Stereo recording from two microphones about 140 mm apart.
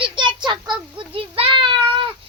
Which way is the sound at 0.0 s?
35° right (ahead or behind).